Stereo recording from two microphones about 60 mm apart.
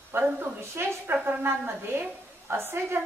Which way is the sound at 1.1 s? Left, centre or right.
Right.